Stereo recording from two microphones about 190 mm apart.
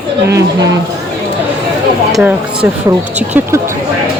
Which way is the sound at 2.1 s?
5° right (ahead or behind).